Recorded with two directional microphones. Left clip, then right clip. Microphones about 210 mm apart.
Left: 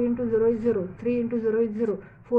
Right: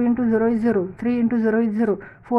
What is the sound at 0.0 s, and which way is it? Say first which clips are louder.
A woman's voice: right 2 dB; 55° right (ahead or behind).